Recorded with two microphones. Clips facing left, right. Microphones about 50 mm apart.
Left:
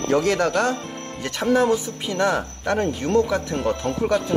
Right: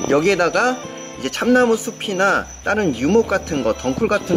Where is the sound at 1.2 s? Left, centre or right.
Right.